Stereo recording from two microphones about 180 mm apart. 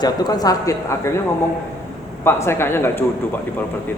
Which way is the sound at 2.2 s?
15° left (ahead or behind).